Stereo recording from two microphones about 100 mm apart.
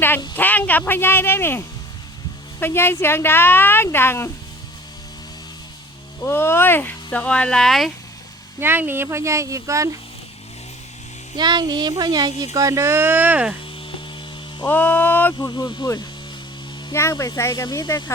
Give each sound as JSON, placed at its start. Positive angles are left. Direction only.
{"t": 0.3, "sound": "a woman's voice", "side_deg": 20}
{"t": 6.2, "sound": "speech", "side_deg": 25}
{"t": 8.6, "sound": "speech", "side_deg": -20}
{"t": 11.3, "sound": "speech", "side_deg": -45}
{"t": 14.7, "sound": "speech", "side_deg": 15}
{"t": 15.4, "sound": "speech", "side_deg": 40}
{"t": 16.9, "sound": "speech", "side_deg": 30}